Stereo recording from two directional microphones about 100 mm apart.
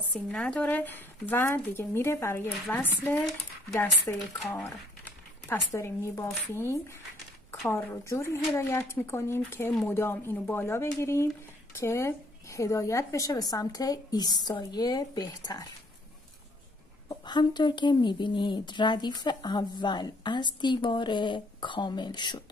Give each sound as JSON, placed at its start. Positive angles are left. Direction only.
{"t": 0.1, "sound": "speech", "side_deg": 10}
{"t": 4.6, "sound": "a woman's voice", "side_deg": 20}
{"t": 17.1, "sound": "a woman's voice", "side_deg": 45}